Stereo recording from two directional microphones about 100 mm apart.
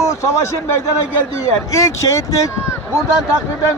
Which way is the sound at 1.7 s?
30° left (ahead or behind).